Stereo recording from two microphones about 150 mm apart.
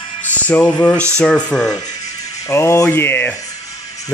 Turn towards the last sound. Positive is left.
turn(degrees=15)  # may be behind; listen again after turning